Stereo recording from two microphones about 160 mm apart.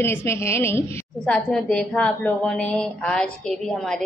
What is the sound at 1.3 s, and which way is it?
A woman's voice, 5° left (ahead or behind).